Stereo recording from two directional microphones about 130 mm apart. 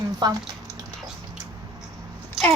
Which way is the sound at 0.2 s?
30° right (ahead or behind).